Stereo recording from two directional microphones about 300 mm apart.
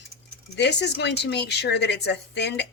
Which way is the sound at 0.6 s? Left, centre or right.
Left.